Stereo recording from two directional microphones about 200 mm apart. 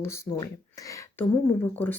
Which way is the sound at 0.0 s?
15° left (ahead or behind).